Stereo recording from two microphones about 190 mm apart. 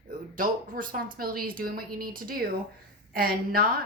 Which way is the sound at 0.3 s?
45° right (ahead or behind).